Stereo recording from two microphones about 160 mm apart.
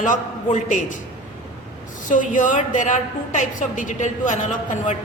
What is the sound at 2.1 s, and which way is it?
A woman's voice, 55° left (ahead or behind).